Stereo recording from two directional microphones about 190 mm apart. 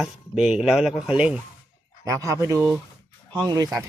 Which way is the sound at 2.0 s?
15° right (ahead or behind).